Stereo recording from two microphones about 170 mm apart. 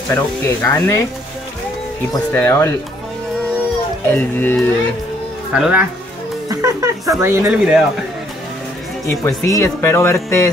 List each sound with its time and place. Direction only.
0.1 s speech: 15° left (ahead or behind)
2.3 s speech: 15° left (ahead or behind)
4.1 s speech: 10° left (ahead or behind)
5.5 s speech: 5° right (ahead or behind)
6.5 s speech: 20° right (ahead or behind)
7.4 s speech: 5° right (ahead or behind)
9.0 s speech: 20° left (ahead or behind)